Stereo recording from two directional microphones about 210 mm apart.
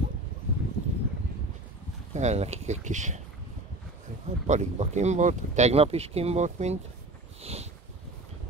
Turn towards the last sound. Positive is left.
turn(degrees=-30)  # may be behind; listen again after turning